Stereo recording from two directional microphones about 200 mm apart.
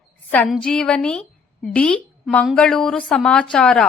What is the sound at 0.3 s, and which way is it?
A woman's voice, 10° left (ahead or behind).